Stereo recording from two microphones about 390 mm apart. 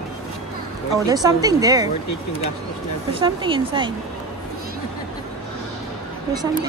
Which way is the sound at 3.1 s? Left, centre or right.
Centre.